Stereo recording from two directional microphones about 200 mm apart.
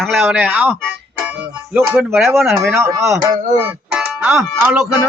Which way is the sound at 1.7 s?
10° right (ahead or behind).